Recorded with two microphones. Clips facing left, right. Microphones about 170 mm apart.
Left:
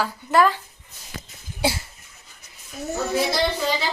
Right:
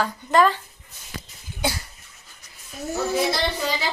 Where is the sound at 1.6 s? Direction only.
30° left (ahead or behind).